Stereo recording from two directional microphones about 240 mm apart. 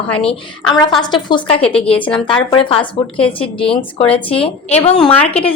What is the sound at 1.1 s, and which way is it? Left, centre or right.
Speech, left.